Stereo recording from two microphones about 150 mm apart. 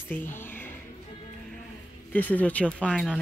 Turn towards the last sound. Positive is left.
turn(degrees=5)  # may be behind; listen again after turning